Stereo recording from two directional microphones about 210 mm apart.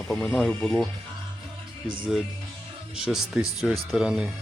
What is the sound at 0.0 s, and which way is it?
Speech, 5° left (ahead or behind).